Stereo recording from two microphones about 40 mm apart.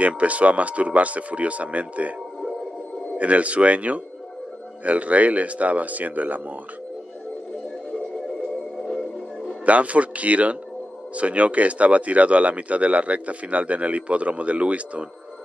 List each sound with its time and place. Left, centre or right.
0.0 s speech: right
3.2 s speech: right
8.8 s music: centre
9.7 s speech: right